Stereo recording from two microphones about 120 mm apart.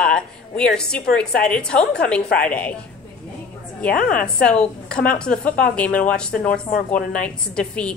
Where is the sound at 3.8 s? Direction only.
10° left (ahead or behind).